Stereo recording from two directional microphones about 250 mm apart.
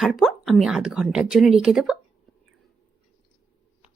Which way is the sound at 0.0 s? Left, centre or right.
Centre.